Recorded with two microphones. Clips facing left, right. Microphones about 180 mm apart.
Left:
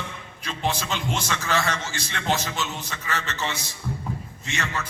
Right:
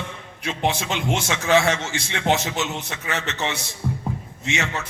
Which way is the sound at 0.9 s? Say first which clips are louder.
Right 4 dB; 65° right (ahead or behind).